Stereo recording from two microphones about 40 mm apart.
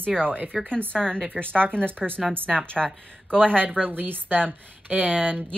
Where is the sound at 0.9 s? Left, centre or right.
Left.